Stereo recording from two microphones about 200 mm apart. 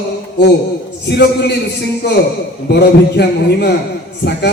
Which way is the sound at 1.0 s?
55° left (ahead or behind).